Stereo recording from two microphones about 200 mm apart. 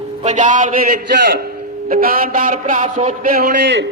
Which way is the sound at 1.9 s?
45° right (ahead or behind).